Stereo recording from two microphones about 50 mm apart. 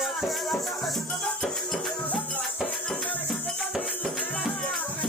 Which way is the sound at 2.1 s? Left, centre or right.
Left.